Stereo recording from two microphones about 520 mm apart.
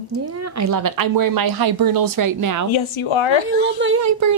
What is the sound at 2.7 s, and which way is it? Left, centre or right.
Speech, left.